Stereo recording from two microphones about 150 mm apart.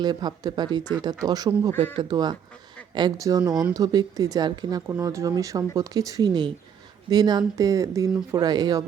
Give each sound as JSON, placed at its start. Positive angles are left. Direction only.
{"t": 0.0, "sound": "speech", "side_deg": -25}